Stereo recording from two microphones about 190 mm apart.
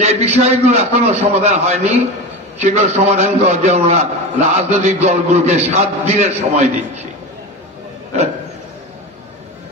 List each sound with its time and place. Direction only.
0.0 s a man's voice: 35° right (ahead or behind)